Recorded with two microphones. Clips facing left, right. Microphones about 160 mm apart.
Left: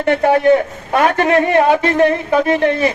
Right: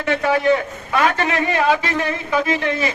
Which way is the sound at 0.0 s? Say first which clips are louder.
Left 5 dB; 55° left (ahead or behind).